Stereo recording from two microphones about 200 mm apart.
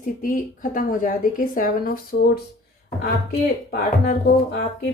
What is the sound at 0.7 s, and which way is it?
A woman's voice, 40° left (ahead or behind).